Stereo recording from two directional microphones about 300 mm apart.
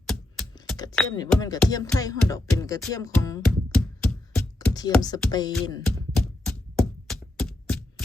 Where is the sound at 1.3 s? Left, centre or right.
Centre.